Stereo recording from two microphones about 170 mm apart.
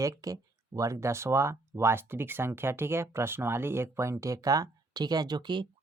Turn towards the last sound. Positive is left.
turn(degrees=-25)  # may be behind; listen again after turning